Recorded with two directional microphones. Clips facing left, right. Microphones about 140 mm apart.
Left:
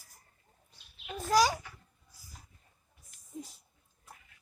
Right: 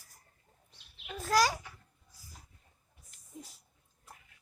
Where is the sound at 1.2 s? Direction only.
Centre (ahead or behind).